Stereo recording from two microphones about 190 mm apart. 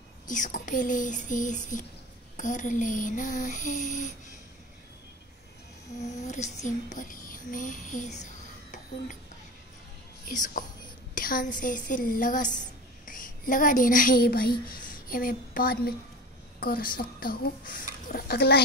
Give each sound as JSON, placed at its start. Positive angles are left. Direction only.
{"t": 0.3, "sound": "a woman's voice", "side_deg": 40}
{"t": 5.9, "sound": "a child's voice", "side_deg": 40}
{"t": 10.2, "sound": "a woman's voice", "side_deg": 45}